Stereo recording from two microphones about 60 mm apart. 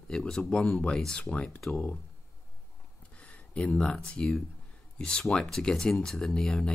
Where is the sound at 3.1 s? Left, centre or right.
Left.